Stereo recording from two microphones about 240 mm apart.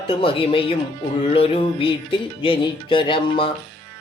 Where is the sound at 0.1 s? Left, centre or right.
Left.